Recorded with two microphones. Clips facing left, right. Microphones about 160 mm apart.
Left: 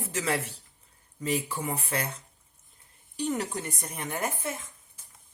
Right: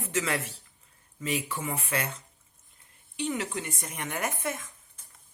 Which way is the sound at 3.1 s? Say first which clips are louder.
Left 1 dB; 40° left (ahead or behind).